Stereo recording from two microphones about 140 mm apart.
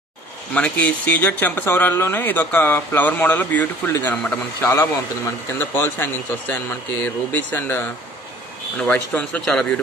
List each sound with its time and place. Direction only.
0.6 s speech: 10° left (ahead or behind)